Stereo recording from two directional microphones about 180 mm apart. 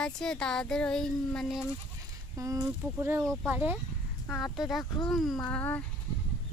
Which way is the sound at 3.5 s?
10° right (ahead or behind).